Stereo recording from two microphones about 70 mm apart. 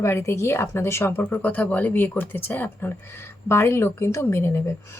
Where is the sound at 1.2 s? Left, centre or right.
Left.